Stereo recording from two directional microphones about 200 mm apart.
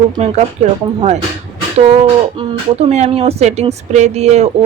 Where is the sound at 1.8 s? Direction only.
30° right (ahead or behind).